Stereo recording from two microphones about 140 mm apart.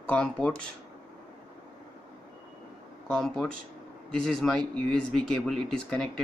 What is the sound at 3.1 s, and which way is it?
Speech, centre (ahead or behind).